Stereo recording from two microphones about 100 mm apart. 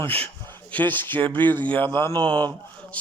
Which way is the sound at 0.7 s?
15° left (ahead or behind).